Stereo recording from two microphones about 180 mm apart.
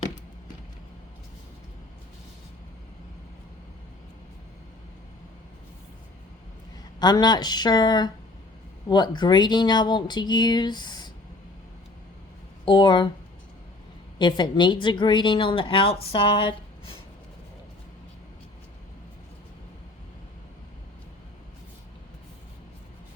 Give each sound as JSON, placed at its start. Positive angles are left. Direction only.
{"t": 7.0, "sound": "a woman's voice", "side_deg": 25}
{"t": 12.6, "sound": "a woman's voice", "side_deg": 25}
{"t": 14.2, "sound": "a woman's voice", "side_deg": 25}